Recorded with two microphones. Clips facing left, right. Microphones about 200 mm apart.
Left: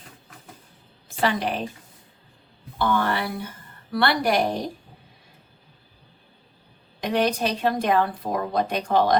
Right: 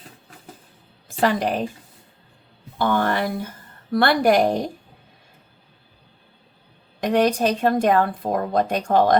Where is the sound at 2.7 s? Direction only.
45° right (ahead or behind).